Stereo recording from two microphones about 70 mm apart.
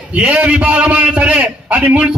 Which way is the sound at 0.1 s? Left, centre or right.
Centre.